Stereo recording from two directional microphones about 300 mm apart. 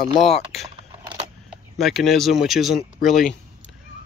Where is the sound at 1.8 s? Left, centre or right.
Centre.